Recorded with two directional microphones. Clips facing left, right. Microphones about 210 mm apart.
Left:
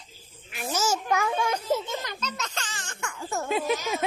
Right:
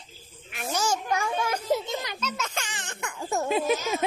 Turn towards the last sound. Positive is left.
turn(degrees=-20)  # may be behind; listen again after turning